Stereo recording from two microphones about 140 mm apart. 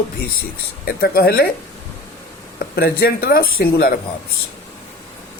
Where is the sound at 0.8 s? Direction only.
90° left.